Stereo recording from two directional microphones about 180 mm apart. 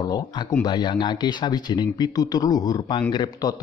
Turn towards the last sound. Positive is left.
turn(degrees=25)  # may be behind; listen again after turning